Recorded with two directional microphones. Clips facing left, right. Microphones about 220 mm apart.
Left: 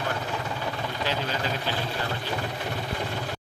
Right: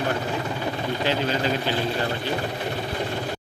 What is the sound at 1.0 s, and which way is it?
Speech, 25° right (ahead or behind).